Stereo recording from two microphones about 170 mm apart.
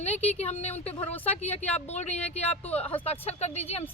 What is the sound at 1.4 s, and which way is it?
A woman's voice, 40° left (ahead or behind).